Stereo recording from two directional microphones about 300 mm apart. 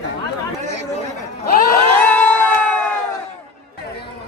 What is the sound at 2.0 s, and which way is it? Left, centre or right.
Crowd, centre.